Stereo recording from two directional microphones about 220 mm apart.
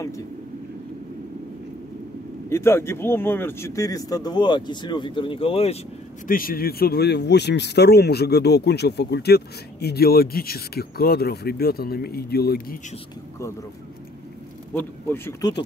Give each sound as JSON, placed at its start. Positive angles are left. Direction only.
{"t": 2.5, "sound": "speech", "side_deg": 10}
{"t": 6.2, "sound": "speech", "side_deg": 40}
{"t": 14.7, "sound": "speech", "side_deg": 10}